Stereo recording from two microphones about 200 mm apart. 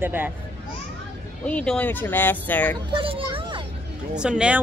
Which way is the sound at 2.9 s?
25° right (ahead or behind).